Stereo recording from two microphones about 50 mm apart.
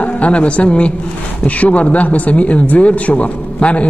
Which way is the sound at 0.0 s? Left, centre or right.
Left.